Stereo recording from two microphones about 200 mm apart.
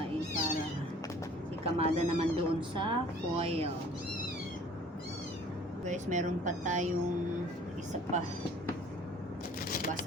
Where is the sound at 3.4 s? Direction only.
30° right (ahead or behind).